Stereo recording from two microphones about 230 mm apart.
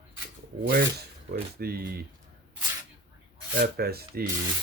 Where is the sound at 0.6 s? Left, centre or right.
Right.